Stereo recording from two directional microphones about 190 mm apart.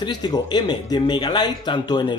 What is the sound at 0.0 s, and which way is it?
Speech, 20° left (ahead or behind).